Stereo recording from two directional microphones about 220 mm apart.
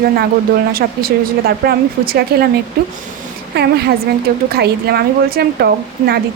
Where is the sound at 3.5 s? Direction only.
50° right (ahead or behind).